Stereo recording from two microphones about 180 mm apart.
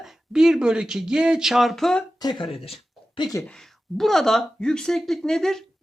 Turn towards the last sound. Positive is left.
turn(degrees=0)  # may be behind; listen again after turning